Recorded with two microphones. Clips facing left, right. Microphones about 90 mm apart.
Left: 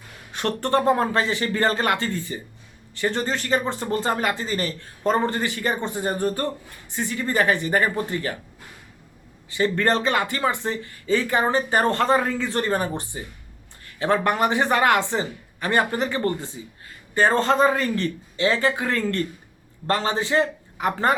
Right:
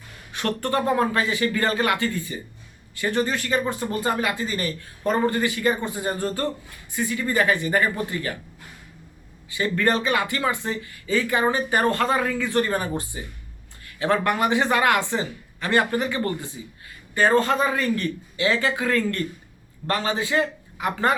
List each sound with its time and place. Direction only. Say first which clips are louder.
0.3 s speech: left 2 dB; 30° left (ahead or behind)
6.9 s speech: even; 30° left (ahead or behind)
9.6 s a man's voice: left 1 dB; 30° left (ahead or behind)
10.2 s speech: left 1 dB; 25° left (ahead or behind)